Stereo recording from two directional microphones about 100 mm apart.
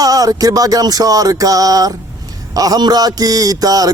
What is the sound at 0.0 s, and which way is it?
Speech, 35° right (ahead or behind).